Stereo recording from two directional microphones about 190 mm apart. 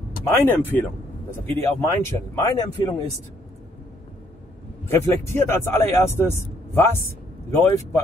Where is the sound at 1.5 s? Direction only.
15° left (ahead or behind).